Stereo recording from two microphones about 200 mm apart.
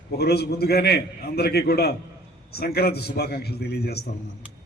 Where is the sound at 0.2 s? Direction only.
55° left (ahead or behind).